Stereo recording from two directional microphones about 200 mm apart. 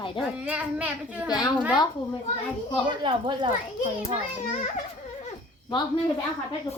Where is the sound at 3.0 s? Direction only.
25° right (ahead or behind).